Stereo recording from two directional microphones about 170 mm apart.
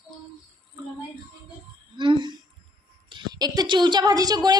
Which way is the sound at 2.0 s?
30° right (ahead or behind).